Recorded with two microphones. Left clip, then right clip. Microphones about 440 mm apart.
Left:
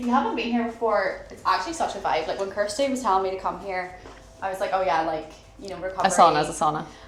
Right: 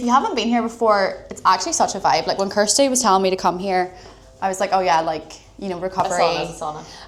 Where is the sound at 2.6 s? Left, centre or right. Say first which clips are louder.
Right 8 dB; right.